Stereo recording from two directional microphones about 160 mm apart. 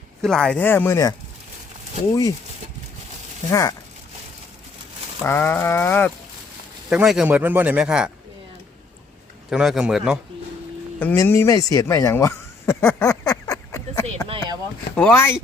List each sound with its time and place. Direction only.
0.2 s speech: 5° left (ahead or behind)
3.5 s speech: 20° left (ahead or behind)
5.2 s speech: 15° left (ahead or behind)
6.9 s speech: 5° right (ahead or behind)
9.5 s speech: 5° right (ahead or behind)
11.0 s a sound: 15° left (ahead or behind)
14.3 s a sound: 35° right (ahead or behind)
14.9 s speech: 10° left (ahead or behind)